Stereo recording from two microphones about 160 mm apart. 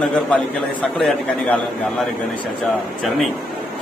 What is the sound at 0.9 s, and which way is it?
Speech, centre (ahead or behind).